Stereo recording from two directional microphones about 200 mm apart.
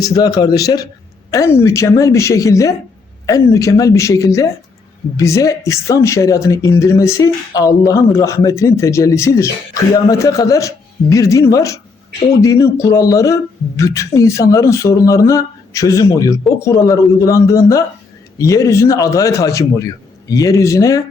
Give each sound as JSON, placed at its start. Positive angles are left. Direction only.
{"t": 0.0, "sound": "a man's voice", "side_deg": 20}